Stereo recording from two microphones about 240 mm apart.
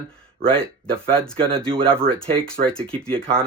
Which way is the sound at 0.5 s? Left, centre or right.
Centre.